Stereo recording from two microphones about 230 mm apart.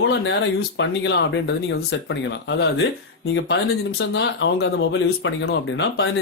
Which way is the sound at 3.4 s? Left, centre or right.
Left.